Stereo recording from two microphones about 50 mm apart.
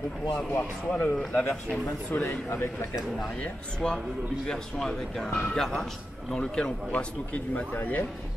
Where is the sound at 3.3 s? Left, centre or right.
Centre.